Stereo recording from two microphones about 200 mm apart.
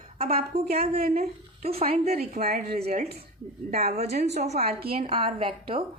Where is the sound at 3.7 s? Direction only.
50° right (ahead or behind).